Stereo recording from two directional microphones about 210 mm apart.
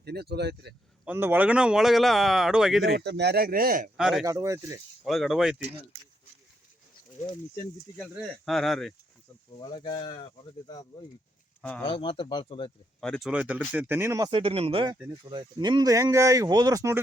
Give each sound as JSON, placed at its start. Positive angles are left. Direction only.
{"t": 0.0, "sound": "speech", "side_deg": -50}
{"t": 1.0, "sound": "speech", "side_deg": -10}
{"t": 3.0, "sound": "a man's voice", "side_deg": -55}
{"t": 3.9, "sound": "speech", "side_deg": 0}
{"t": 4.3, "sound": "speech", "side_deg": -15}
{"t": 5.0, "sound": "speech", "side_deg": 0}
{"t": 7.9, "sound": "speech", "side_deg": -5}
{"t": 9.6, "sound": "speech", "side_deg": 20}
{"t": 11.8, "sound": "speech", "side_deg": 25}
{"t": 13.0, "sound": "speech", "side_deg": 0}